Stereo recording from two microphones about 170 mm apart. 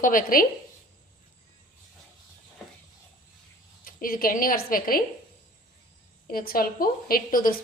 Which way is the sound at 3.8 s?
55° left (ahead or behind).